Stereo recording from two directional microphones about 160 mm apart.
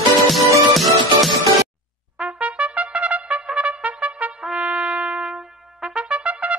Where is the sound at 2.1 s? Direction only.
5° right (ahead or behind).